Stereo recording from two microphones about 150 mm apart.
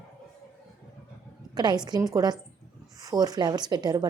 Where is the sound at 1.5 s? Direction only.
30° right (ahead or behind).